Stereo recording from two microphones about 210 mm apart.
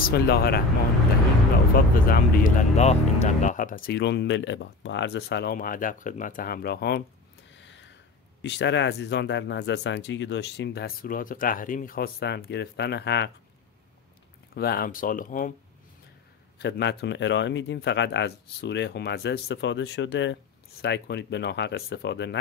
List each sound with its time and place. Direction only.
0.0 s speech: 45° left (ahead or behind)
2.0 s speech: 45° left (ahead or behind)
7.5 s a sound: 60° left (ahead or behind)
8.4 s speech: 55° left (ahead or behind)
14.5 s speech: 45° left (ahead or behind)
16.5 s speech: 55° left (ahead or behind)